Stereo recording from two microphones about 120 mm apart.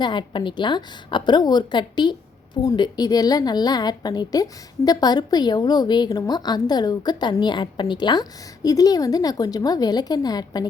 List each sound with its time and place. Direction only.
0.0 s a woman's voice: 40° left (ahead or behind)